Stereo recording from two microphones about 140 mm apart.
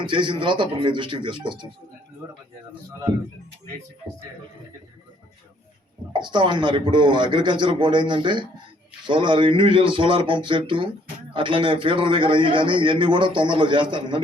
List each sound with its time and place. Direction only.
0.0 s a man's voice: 35° right (ahead or behind)
6.1 s a man's voice: 35° right (ahead or behind)